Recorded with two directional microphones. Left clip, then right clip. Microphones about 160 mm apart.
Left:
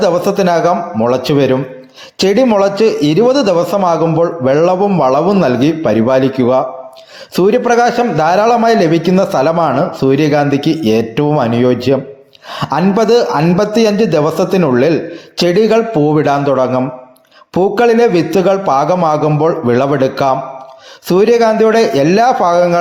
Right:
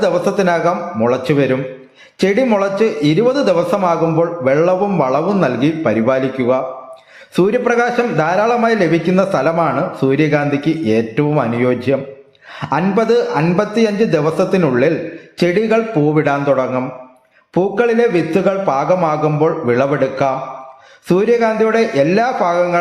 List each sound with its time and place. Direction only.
0.0 s a man's voice: 25° left (ahead or behind)